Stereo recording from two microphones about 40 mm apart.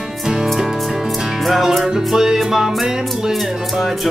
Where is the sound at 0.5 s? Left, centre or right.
Centre.